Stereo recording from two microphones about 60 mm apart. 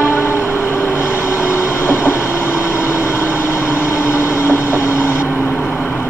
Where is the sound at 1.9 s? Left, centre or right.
Left.